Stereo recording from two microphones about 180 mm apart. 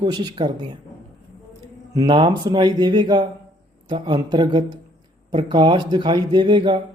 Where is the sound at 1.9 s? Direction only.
25° right (ahead or behind).